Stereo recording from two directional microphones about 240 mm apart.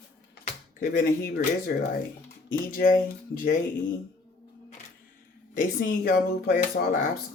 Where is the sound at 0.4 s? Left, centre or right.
Left.